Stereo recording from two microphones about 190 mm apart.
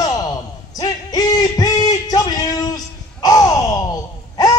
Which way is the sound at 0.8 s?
20° left (ahead or behind).